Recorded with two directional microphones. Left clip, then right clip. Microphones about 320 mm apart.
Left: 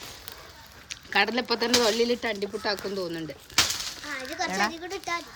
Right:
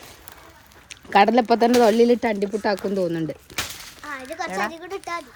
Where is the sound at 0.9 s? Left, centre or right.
Centre.